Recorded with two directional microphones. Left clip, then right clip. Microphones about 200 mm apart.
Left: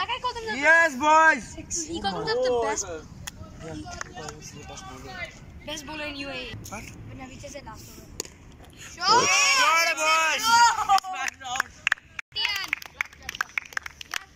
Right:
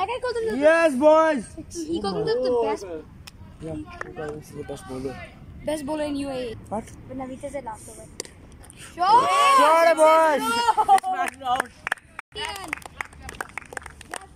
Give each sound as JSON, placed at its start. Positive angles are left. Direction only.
{"t": 0.0, "sound": "a sound", "side_deg": -55}
{"t": 0.5, "sound": "a woman's voice", "side_deg": -35}
{"t": 4.0, "sound": "speech", "side_deg": -45}
{"t": 5.0, "sound": "speech", "side_deg": -5}
{"t": 5.7, "sound": "speech", "side_deg": -40}
{"t": 9.3, "sound": "speech", "side_deg": -30}
{"t": 12.5, "sound": "clapping", "side_deg": -25}